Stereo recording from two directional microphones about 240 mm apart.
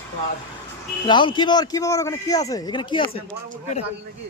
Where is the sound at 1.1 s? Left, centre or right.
Centre.